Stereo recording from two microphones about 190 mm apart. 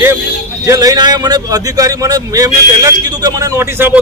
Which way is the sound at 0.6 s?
15° right (ahead or behind).